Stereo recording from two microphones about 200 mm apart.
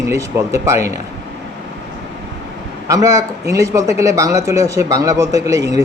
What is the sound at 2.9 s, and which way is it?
Speech, 15° right (ahead or behind).